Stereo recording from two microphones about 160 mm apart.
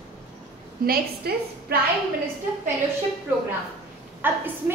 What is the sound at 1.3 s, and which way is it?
Speech, 85° right.